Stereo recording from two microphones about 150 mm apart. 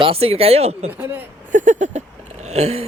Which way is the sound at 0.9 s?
15° right (ahead or behind).